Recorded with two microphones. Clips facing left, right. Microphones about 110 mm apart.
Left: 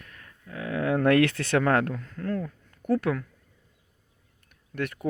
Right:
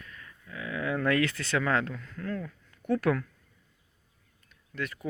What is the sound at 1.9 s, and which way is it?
Speech, 40° left (ahead or behind).